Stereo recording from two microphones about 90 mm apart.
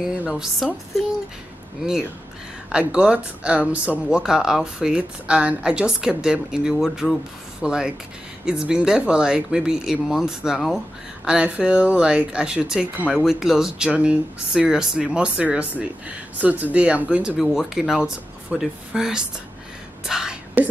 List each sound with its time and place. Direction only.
0.3 s speech: 5° right (ahead or behind)
2.7 s speech: 10° right (ahead or behind)
17.4 s speech: 5° right (ahead or behind)
20.1 s whispering: 10° right (ahead or behind)